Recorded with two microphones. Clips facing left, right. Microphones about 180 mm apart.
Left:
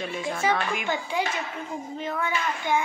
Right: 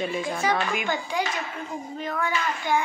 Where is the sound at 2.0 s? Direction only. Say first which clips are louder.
Right 1 dB; 25° left (ahead or behind).